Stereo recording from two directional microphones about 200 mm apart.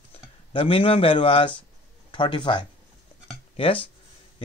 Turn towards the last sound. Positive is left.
turn(degrees=25)  # may be behind; listen again after turning